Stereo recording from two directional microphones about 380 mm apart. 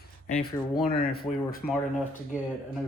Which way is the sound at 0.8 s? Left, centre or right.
Left.